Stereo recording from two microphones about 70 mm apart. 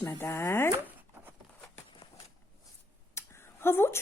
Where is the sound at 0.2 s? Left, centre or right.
Left.